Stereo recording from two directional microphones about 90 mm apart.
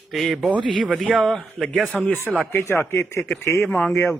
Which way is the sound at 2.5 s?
30° left (ahead or behind).